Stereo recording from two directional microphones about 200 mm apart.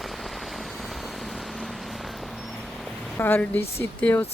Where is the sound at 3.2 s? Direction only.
10° left (ahead or behind).